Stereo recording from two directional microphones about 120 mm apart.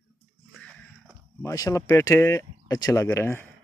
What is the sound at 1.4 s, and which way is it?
Speech, 30° left (ahead or behind).